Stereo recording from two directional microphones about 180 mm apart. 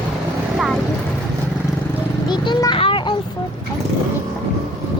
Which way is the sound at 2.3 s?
25° left (ahead or behind).